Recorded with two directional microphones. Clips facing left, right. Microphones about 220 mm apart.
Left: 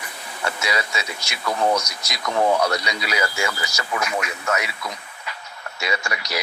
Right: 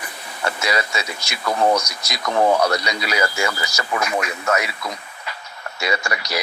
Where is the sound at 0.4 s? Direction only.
45° right (ahead or behind).